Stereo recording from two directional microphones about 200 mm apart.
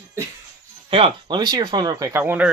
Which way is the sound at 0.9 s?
25° right (ahead or behind).